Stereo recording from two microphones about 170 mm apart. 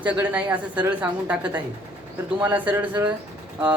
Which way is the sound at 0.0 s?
10° right (ahead or behind).